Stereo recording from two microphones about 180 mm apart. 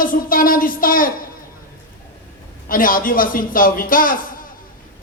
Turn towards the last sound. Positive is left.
turn(degrees=50)  # may be behind; listen again after turning